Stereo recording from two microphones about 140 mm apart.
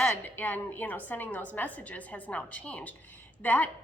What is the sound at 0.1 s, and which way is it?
A woman's voice, 10° left (ahead or behind).